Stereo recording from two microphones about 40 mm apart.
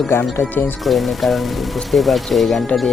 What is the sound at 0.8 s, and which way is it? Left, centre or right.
Speech, centre.